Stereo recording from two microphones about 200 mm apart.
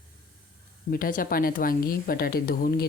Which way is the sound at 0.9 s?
45° left (ahead or behind).